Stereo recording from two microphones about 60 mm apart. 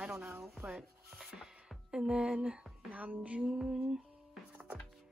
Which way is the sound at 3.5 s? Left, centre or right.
Centre.